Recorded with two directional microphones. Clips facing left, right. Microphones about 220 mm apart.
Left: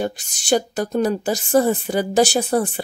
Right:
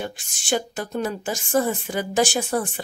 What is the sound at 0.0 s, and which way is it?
A woman's voice, 40° left (ahead or behind).